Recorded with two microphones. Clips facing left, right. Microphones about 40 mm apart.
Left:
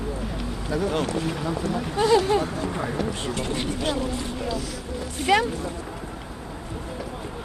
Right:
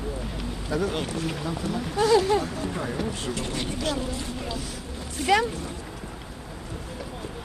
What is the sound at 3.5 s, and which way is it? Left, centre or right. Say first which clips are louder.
Speech: left 1 dB; left.